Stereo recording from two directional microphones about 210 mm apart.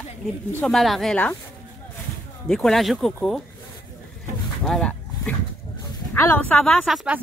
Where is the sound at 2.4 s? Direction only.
Centre (ahead or behind).